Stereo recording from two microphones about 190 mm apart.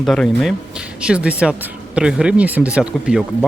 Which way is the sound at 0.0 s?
Centre (ahead or behind).